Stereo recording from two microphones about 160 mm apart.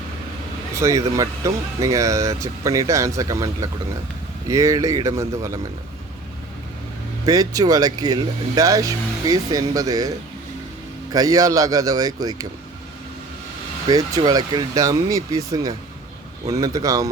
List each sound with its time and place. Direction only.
0.8 s speech: 20° right (ahead or behind)
7.3 s speech: 25° right (ahead or behind)
13.8 s speech: 25° right (ahead or behind)